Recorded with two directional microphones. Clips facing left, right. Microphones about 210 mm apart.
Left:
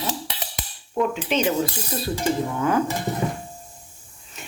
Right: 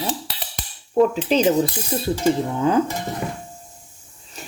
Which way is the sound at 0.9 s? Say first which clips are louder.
Right 6 dB; 35° right (ahead or behind).